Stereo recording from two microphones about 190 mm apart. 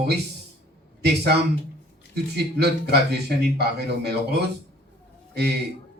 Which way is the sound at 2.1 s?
60° right (ahead or behind).